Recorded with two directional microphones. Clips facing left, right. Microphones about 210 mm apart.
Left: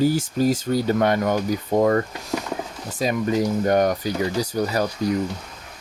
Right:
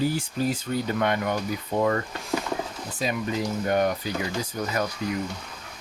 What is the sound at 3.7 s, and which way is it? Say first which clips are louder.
Speech: left 2 dB; 45° left (ahead or behind).